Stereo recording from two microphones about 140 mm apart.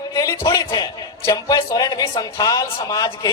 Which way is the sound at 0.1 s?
25° left (ahead or behind).